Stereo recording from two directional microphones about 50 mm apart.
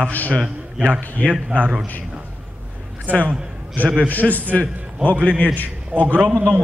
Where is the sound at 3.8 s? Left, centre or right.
Left.